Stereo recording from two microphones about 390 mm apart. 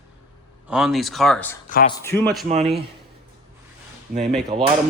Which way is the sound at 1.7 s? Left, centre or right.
Left.